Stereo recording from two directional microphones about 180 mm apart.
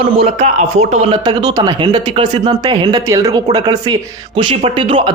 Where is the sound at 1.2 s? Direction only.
20° right (ahead or behind).